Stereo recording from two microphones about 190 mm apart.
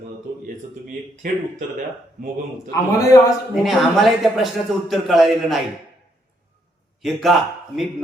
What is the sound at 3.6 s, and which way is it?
A man's voice, centre (ahead or behind).